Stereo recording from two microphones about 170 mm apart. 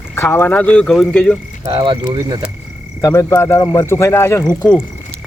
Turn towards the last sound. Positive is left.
turn(degrees=5)  # may be behind; listen again after turning